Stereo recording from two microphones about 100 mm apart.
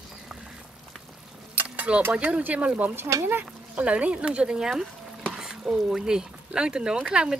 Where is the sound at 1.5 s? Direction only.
15° right (ahead or behind).